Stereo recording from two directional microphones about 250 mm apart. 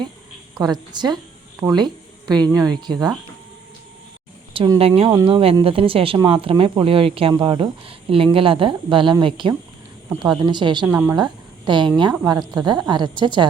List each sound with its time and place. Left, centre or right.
0.6 s a woman's voice: centre
4.5 s a woman's voice: centre
10.8 s a woman's voice: centre
11.2 s a woman's voice: centre